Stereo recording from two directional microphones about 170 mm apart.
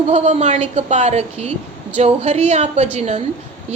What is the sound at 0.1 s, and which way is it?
A woman's voice, 40° right (ahead or behind).